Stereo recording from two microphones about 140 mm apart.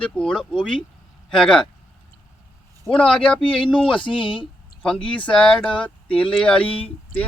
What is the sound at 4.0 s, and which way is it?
Speech, 35° left (ahead or behind).